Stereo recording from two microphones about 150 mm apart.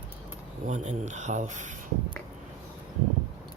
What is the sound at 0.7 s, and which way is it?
A man's voice, 55° right (ahead or behind).